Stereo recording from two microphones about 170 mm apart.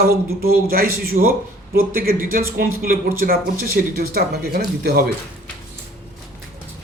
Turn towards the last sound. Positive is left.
turn(degrees=-60)  # may be behind; listen again after turning